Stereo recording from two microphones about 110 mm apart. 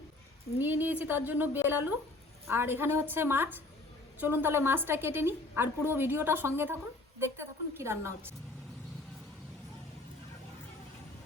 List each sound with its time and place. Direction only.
0.6 s a woman's voice: 20° right (ahead or behind)